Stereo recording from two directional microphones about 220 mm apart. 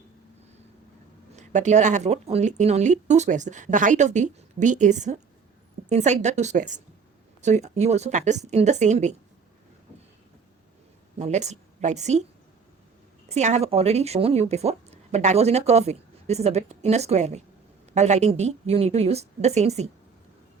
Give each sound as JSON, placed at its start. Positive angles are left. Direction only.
{"t": 1.4, "sound": "speech", "side_deg": -30}
{"t": 11.2, "sound": "a woman's voice", "side_deg": -30}
{"t": 13.3, "sound": "a woman's voice", "side_deg": -30}